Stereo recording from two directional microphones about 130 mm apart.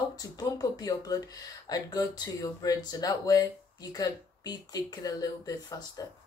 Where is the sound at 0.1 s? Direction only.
30° left (ahead or behind).